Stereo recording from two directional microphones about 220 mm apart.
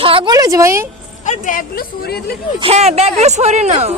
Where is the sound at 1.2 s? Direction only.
35° left (ahead or behind).